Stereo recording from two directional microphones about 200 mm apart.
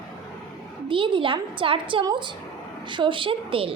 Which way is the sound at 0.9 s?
25° right (ahead or behind).